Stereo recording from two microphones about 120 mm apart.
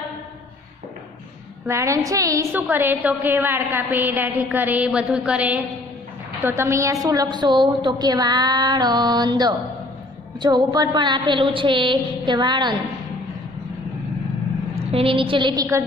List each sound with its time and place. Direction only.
1.7 s a woman's voice: 25° right (ahead or behind)
2.5 s a woman's voice: 15° right (ahead or behind); by 12.7 s 40° right (ahead or behind)
14.9 s a woman's voice: 50° right (ahead or behind)
15.5 s a woman's voice: 30° right (ahead or behind)